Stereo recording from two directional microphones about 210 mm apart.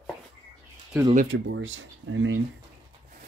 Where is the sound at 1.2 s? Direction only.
60° right (ahead or behind).